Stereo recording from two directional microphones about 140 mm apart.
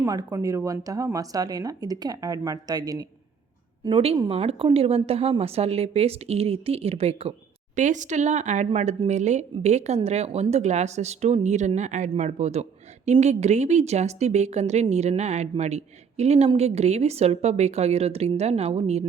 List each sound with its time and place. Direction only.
0.0 s speech: 25° right (ahead or behind)
3.8 s speech: 45° right (ahead or behind)
7.8 s speech: 60° right (ahead or behind)